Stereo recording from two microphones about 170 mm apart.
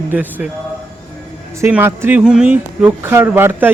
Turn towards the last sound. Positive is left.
turn(degrees=-10)  # may be behind; listen again after turning